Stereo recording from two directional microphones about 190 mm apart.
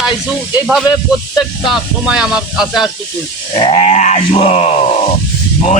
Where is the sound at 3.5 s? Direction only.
35° left (ahead or behind).